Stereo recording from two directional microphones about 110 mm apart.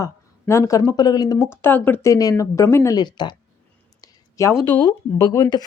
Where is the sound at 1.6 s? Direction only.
15° left (ahead or behind).